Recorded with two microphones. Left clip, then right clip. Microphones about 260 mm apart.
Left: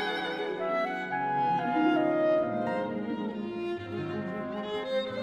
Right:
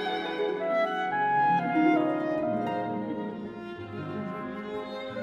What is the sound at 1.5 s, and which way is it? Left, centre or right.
Clarinet, centre.